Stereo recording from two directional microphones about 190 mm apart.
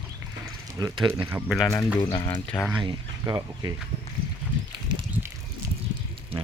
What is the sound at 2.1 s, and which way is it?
Speech, 25° left (ahead or behind).